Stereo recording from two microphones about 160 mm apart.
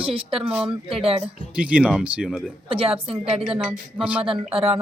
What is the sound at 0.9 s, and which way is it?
Speech, 35° right (ahead or behind).